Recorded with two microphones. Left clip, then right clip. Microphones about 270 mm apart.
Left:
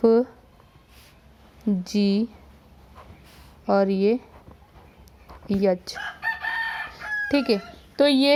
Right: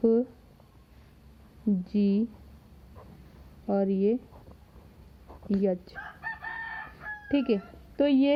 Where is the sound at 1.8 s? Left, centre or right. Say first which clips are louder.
Left 5 dB; centre.